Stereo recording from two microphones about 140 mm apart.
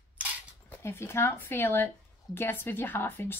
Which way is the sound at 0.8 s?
20° left (ahead or behind).